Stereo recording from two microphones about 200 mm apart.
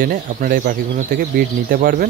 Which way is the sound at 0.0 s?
45° right (ahead or behind).